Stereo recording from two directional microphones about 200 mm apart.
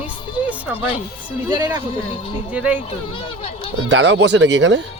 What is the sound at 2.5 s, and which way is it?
Speech, 5° right (ahead or behind).